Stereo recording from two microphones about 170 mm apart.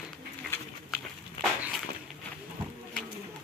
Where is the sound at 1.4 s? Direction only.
Centre (ahead or behind).